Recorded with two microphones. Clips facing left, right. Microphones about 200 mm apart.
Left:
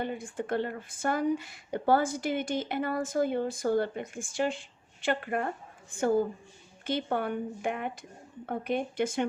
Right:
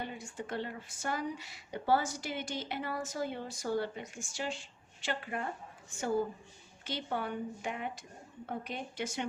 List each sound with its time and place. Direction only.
0.1 s speech: 55° left (ahead or behind)